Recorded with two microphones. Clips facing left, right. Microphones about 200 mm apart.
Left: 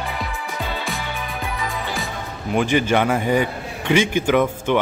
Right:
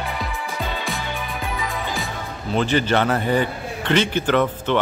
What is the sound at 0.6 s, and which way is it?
Music, centre (ahead or behind).